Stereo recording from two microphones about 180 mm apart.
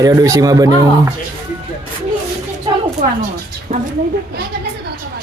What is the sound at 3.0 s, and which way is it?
Speech, 45° right (ahead or behind).